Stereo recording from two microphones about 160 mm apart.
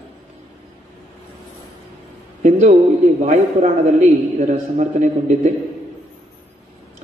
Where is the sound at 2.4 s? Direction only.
50° right (ahead or behind).